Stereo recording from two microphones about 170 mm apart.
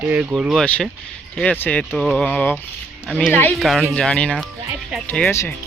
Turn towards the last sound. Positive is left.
turn(degrees=15)  # may be behind; listen again after turning